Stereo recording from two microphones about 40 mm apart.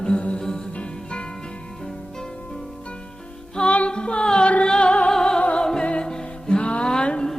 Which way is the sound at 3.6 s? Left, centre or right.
Left.